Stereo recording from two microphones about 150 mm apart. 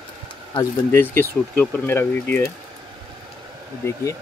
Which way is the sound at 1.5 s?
15° left (ahead or behind).